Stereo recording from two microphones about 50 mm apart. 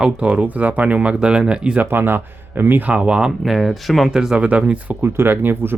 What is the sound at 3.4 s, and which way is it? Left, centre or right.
Speech, centre.